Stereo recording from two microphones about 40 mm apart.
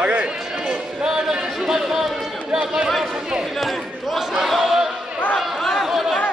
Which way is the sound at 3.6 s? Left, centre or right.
Centre.